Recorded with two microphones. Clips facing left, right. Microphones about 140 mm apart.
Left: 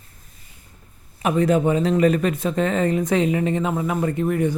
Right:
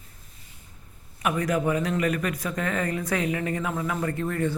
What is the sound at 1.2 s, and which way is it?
Speech, 25° left (ahead or behind).